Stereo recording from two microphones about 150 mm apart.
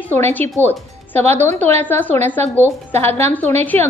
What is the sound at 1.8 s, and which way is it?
A woman's voice, 10° left (ahead or behind).